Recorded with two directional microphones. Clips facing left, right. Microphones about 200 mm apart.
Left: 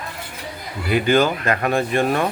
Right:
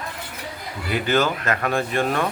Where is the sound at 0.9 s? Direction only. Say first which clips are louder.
Left 4 dB; 15° left (ahead or behind).